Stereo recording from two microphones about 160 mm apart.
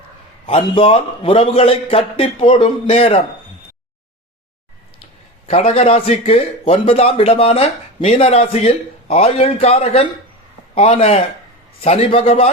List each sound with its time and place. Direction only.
0.4 s a man's voice: 35° left (ahead or behind)
5.5 s a man's voice: 40° left (ahead or behind)